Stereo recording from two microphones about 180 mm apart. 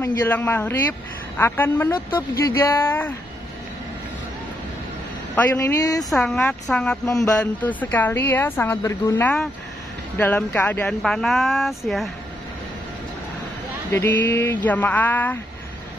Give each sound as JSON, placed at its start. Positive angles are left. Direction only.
{"t": 0.0, "sound": "a woman's voice", "side_deg": 10}
{"t": 5.3, "sound": "a woman's voice", "side_deg": 10}
{"t": 6.0, "sound": "a woman's voice", "side_deg": 0}
{"t": 13.9, "sound": "a woman's voice", "side_deg": 10}